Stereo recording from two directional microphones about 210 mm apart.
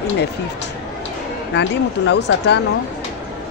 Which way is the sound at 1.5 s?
55° left (ahead or behind).